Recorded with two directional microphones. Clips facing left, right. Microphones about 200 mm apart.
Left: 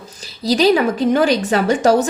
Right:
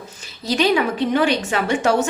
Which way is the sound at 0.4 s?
35° left (ahead or behind).